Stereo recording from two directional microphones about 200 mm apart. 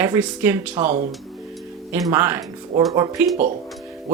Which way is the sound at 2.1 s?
10° right (ahead or behind).